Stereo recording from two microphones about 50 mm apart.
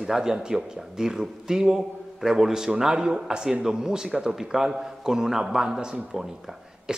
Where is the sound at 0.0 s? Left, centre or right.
Centre.